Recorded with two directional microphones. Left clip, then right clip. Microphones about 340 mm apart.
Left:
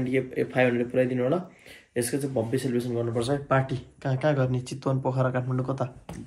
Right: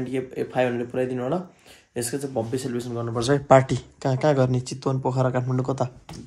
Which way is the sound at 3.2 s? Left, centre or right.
Right.